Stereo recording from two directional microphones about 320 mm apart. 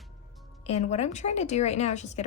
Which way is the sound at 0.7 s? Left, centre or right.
Centre.